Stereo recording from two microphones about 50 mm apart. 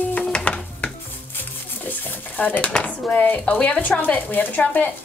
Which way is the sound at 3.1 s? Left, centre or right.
Left.